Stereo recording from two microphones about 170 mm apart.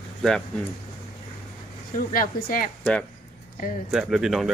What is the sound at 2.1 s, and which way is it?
Speech, 55° left (ahead or behind).